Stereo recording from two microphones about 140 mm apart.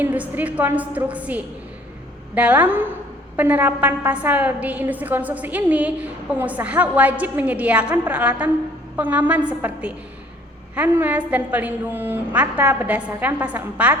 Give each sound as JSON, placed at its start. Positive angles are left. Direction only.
{"t": 0.0, "sound": "a woman's voice", "side_deg": -10}